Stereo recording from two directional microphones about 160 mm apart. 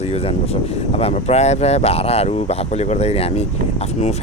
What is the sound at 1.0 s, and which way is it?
Speech, 40° left (ahead or behind).